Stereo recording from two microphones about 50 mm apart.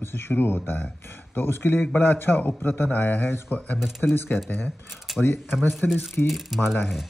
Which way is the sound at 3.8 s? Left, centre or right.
Centre.